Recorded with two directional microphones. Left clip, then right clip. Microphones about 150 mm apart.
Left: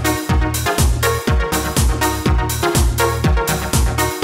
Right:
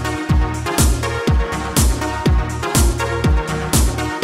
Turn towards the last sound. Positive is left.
turn(degrees=0)  # may be behind; listen again after turning